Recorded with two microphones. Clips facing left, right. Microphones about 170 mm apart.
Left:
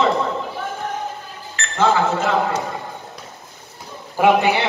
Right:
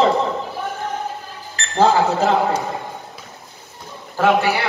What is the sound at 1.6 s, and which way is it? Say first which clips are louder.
A man's voice: right 2 dB; 35° right (ahead or behind).